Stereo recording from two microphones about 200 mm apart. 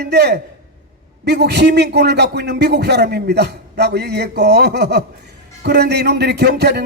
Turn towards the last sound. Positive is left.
turn(degrees=-55)  # may be behind; listen again after turning